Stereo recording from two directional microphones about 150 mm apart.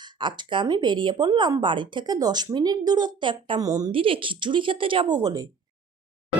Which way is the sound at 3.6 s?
25° right (ahead or behind).